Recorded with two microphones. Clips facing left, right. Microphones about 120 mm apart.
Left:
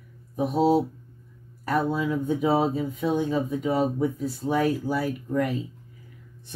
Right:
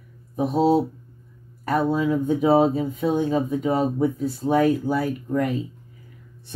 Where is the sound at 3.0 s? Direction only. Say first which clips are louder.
Right 3 dB; 20° right (ahead or behind).